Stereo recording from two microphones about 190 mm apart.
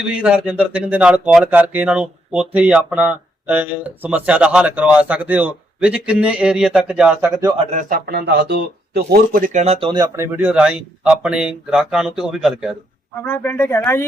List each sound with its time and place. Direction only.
0.2 s speech: 5° right (ahead or behind)
7.7 s speech: 45° right (ahead or behind)
9.8 s speech: 20° right (ahead or behind); by 12.7 s centre (ahead or behind)
13.2 s speech: 10° left (ahead or behind)